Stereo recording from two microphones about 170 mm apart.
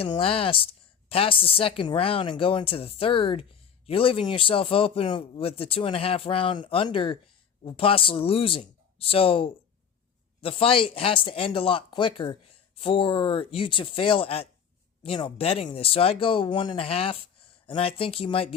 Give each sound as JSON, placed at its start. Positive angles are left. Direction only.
{"t": 0.0, "sound": "speech", "side_deg": 35}